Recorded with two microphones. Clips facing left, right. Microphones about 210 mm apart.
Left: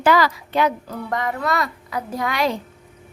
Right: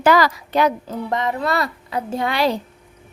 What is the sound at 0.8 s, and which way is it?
A woman's voice, 25° right (ahead or behind).